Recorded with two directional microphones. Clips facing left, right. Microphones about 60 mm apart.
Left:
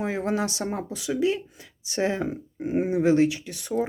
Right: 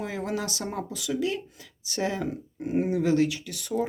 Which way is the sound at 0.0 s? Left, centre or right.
Left.